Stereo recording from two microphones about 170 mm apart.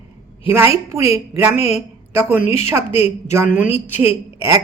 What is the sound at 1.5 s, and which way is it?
Speech, 40° left (ahead or behind).